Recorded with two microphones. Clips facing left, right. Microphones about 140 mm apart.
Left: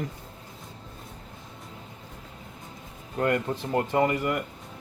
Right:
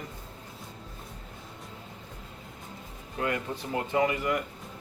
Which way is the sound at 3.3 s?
50° left (ahead or behind).